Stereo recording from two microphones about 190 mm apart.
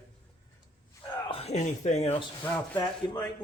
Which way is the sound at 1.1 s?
30° left (ahead or behind).